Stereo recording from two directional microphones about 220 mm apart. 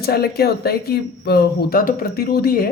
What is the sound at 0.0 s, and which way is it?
A man's voice, 45° left (ahead or behind).